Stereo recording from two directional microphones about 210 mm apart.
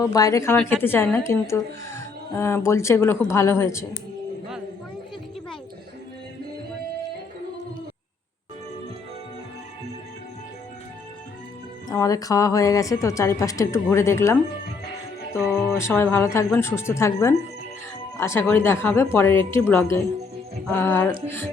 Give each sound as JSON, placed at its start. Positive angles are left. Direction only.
{"t": 0.0, "sound": "a woman's voice", "side_deg": 15}
{"t": 11.9, "sound": "a woman's voice", "side_deg": 15}
{"t": 15.4, "sound": "a sound", "side_deg": 0}
{"t": 15.8, "sound": "a woman's voice", "side_deg": 10}